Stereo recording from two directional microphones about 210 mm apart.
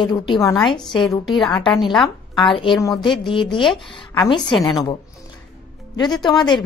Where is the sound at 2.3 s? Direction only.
25° left (ahead or behind).